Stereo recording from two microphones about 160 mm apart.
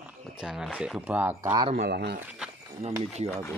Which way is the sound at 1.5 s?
25° right (ahead or behind).